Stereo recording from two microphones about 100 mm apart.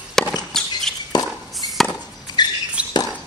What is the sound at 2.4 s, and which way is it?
Rodents, 45° left (ahead or behind).